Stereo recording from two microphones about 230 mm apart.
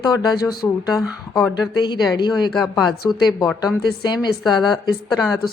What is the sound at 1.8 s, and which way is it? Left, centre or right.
A woman's voice, centre.